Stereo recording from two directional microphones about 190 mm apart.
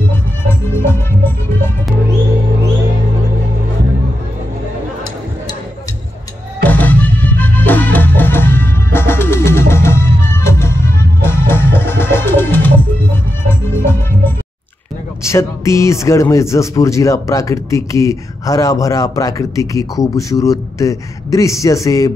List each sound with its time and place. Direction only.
6.6 s music: 10° left (ahead or behind)
15.2 s speech: 15° left (ahead or behind)